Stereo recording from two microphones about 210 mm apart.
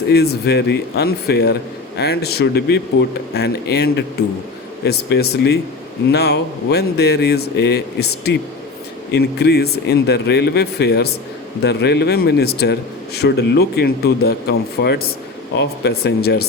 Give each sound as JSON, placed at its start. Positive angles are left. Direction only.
{"t": 0.1, "sound": "speech", "side_deg": 50}